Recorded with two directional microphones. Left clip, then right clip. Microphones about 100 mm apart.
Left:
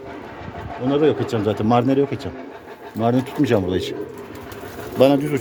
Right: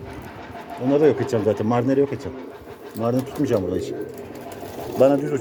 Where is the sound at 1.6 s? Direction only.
40° left (ahead or behind).